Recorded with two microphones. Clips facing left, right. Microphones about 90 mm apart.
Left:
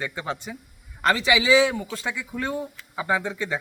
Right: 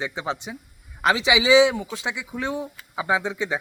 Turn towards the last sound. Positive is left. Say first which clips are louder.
# right 1 dB
turn(degrees=-20)  # may be behind; listen again after turning